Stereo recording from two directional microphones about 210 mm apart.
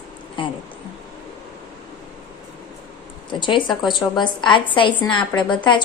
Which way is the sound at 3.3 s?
25° left (ahead or behind).